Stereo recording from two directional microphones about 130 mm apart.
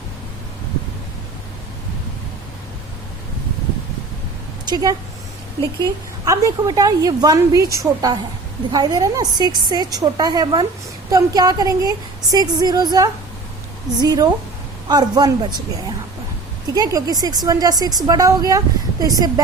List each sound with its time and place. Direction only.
4.6 s a woman's voice: 30° right (ahead or behind)
16.7 s a woman's voice: 30° right (ahead or behind)